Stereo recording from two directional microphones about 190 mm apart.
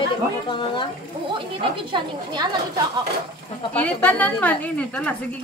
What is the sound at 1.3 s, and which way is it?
Speech, 25° right (ahead or behind).